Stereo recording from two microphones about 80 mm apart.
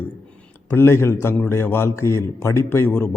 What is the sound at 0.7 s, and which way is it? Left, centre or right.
A man's voice, left.